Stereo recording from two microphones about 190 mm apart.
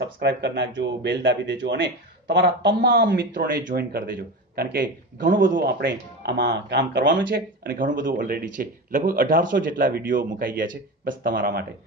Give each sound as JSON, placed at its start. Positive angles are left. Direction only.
{"t": 0.0, "sound": "speech", "side_deg": -65}
{"t": 7.2, "sound": "speech", "side_deg": -50}